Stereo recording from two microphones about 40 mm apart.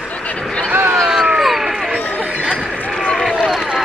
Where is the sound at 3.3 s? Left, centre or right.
Centre.